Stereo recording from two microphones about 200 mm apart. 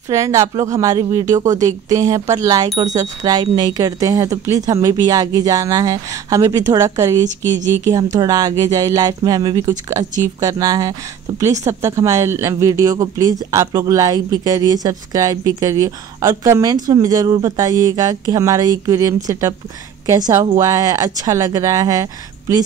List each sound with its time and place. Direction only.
0.1 s speech: 15° right (ahead or behind)